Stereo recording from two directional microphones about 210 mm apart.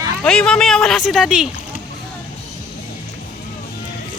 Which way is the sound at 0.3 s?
5° left (ahead or behind).